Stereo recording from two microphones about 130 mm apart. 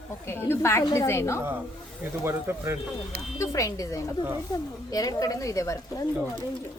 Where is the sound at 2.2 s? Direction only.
20° right (ahead or behind).